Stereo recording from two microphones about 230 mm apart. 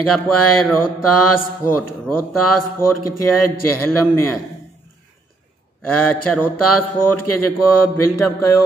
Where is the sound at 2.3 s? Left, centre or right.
Left.